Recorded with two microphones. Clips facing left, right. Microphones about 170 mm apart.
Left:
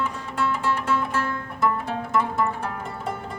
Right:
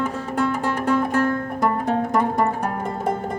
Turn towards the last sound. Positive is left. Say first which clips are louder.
# right 7 dB
turn(degrees=-45)  # may be behind; listen again after turning